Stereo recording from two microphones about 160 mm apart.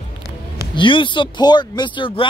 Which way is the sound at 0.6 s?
30° left (ahead or behind).